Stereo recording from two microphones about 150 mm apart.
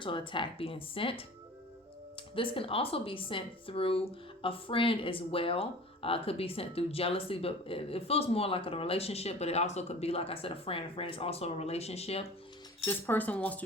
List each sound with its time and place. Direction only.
0.0 s a woman's voice: 35° left (ahead or behind)
2.3 s a woman's voice: 35° left (ahead or behind)
12.8 s speech: 15° left (ahead or behind)